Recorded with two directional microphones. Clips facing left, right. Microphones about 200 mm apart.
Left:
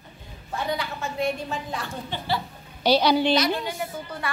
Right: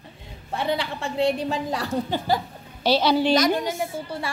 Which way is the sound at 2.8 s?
Centre (ahead or behind).